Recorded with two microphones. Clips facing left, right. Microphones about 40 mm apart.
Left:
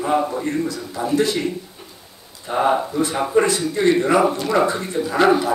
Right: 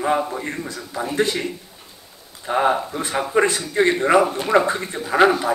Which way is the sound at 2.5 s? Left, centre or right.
Right.